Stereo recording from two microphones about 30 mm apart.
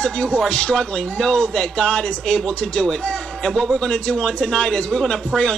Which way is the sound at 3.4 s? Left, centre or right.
Left.